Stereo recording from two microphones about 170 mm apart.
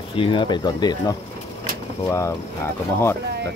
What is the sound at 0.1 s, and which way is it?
Speech, 30° left (ahead or behind).